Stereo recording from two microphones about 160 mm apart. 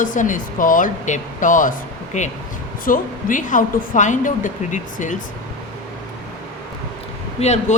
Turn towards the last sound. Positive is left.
turn(degrees=45)  # may be behind; listen again after turning